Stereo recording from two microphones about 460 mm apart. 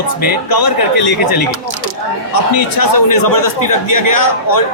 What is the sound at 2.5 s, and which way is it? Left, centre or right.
A man's voice, left.